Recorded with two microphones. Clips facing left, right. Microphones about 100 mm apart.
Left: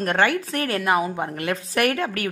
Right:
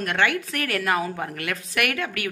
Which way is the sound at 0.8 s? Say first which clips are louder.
Left 3 dB; 20° left (ahead or behind).